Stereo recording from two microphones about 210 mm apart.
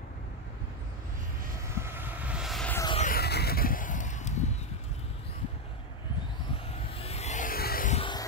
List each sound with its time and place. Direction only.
1.8 s vehicle: 10° right (ahead or behind)
3.0 s a sound: 45° left (ahead or behind)
6.7 s vehicle: 30° left (ahead or behind); by 7.9 s 45° left (ahead or behind)
7.9 s music: 25° left (ahead or behind)